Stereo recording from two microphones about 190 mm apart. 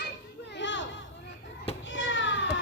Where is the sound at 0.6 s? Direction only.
75° left (ahead or behind).